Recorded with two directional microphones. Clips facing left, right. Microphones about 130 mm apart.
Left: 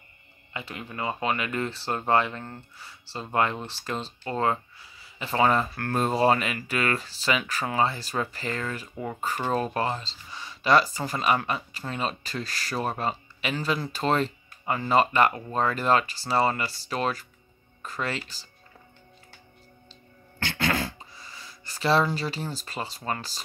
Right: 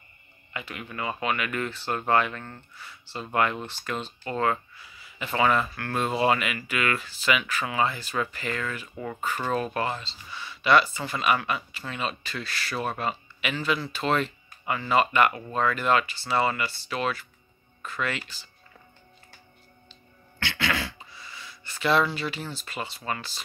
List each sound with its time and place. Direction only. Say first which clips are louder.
0.5 s speech: even; 30° left (ahead or behind)
8.9 s speech: left 1 dB; 25° left (ahead or behind)
19.9 s a sound: left 2 dB; 45° left (ahead or behind)